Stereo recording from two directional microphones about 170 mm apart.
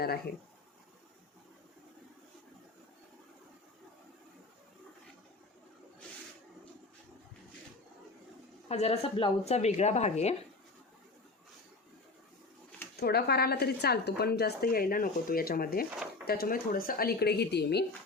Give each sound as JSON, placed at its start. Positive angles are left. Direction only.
{"t": 8.7, "sound": "speech", "side_deg": 35}
{"t": 13.0, "sound": "speech", "side_deg": 65}